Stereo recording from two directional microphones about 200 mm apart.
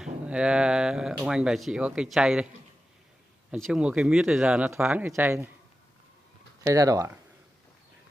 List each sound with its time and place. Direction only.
0.0 s speech: 5° right (ahead or behind)
3.5 s speech: centre (ahead or behind)
6.6 s speech: 15° right (ahead or behind)